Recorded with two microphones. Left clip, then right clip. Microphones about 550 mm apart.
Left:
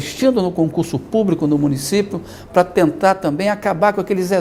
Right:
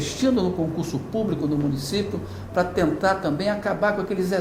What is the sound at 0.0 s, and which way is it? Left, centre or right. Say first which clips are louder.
A woman's voice: left 6 dB; left.